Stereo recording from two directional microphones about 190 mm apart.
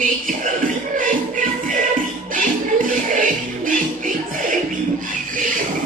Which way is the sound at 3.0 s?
45° right (ahead or behind).